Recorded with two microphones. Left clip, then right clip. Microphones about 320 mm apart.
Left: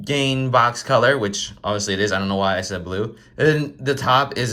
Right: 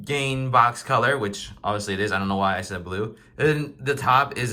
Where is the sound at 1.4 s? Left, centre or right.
Right.